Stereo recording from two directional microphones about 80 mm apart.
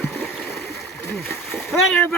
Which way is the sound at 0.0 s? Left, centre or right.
Left.